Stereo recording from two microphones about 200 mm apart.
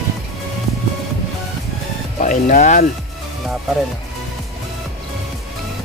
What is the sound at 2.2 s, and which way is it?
Speech, 40° left (ahead or behind).